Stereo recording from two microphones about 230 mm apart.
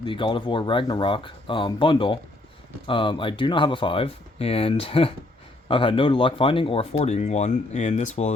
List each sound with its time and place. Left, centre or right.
0.0 s speech: left